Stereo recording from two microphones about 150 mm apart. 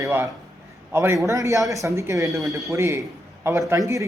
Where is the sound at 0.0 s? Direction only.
15° right (ahead or behind).